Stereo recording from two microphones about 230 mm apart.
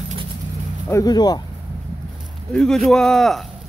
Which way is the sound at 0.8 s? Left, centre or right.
Centre.